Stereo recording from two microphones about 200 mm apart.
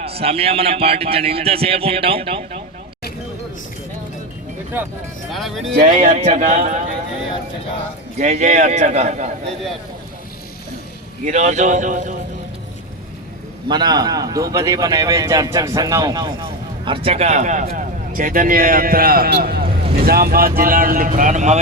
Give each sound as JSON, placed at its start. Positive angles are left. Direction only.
{"t": 0.0, "sound": "a man's voice", "side_deg": -30}
{"t": 4.7, "sound": "a man's voice", "side_deg": -10}
{"t": 5.3, "sound": "speech", "side_deg": 0}
{"t": 5.7, "sound": "speech", "side_deg": -40}
{"t": 8.2, "sound": "speech", "side_deg": -35}
{"t": 11.3, "sound": "speech", "side_deg": -35}
{"t": 13.7, "sound": "a man's voice", "side_deg": -20}